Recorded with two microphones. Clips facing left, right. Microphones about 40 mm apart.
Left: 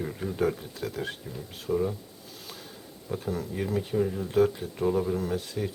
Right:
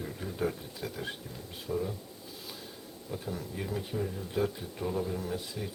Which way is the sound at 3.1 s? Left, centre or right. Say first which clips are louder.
Left 6 dB; centre.